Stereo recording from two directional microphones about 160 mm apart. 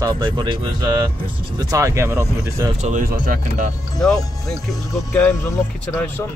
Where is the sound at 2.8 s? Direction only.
45° right (ahead or behind).